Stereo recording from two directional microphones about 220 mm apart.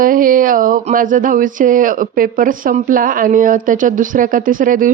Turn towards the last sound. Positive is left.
turn(degrees=-40)  # may be behind; listen again after turning